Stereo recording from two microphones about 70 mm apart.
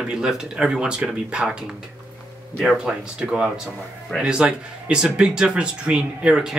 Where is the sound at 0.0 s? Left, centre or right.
Centre.